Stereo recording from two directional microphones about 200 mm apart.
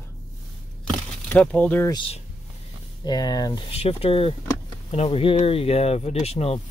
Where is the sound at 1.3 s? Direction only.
5° left (ahead or behind).